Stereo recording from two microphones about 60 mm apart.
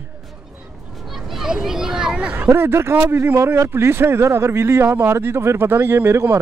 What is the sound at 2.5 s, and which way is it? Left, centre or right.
Speech, right.